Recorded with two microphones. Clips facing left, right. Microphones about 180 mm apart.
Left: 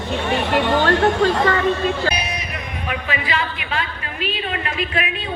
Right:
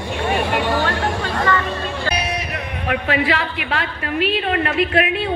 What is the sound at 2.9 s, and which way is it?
A woman's voice, 65° right (ahead or behind).